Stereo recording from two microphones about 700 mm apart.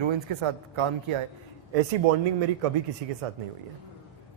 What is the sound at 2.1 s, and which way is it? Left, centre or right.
Speech, right.